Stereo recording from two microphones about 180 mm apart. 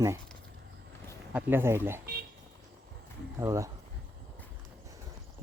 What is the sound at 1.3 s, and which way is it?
Speech, 10° right (ahead or behind).